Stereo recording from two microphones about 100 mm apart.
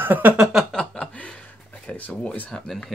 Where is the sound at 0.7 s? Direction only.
10° left (ahead or behind).